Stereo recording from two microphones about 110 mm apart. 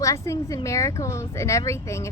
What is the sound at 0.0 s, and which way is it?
A woman's voice, 30° left (ahead or behind).